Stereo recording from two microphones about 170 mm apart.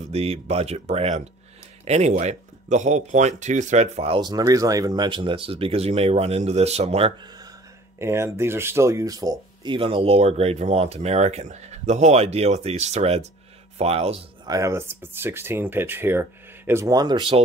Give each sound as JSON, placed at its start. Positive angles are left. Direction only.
{"t": 0.1, "sound": "speech", "side_deg": -35}
{"t": 8.0, "sound": "speech", "side_deg": -15}
{"t": 14.4, "sound": "speech", "side_deg": -20}